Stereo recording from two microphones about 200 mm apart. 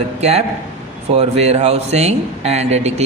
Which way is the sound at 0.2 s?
30° right (ahead or behind).